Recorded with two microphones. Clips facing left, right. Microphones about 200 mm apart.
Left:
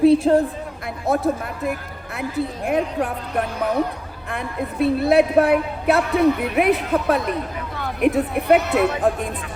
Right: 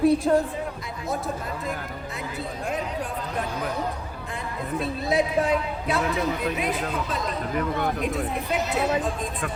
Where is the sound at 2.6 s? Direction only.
60° left (ahead or behind).